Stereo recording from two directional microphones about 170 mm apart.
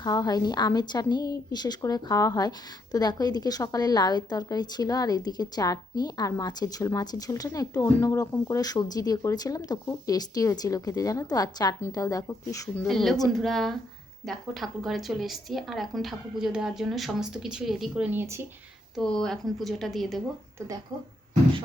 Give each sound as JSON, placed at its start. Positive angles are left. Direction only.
{"t": 0.0, "sound": "a woman's voice", "side_deg": 20}
{"t": 12.9, "sound": "a woman's voice", "side_deg": 0}
{"t": 18.9, "sound": "a woman's voice", "side_deg": 5}